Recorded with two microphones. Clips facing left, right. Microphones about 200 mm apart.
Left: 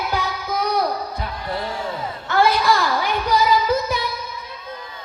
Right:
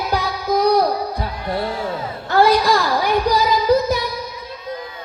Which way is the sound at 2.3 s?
35° right (ahead or behind).